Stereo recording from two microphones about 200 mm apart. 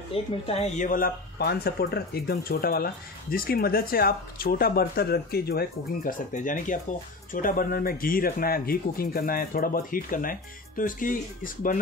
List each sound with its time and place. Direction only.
0.1 s speech: 30° left (ahead or behind)